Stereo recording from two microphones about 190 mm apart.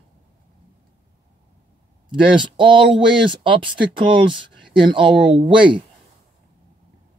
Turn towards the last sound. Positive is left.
turn(degrees=-25)  # may be behind; listen again after turning